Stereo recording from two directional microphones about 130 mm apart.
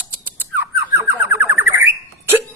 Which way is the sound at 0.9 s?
15° right (ahead or behind).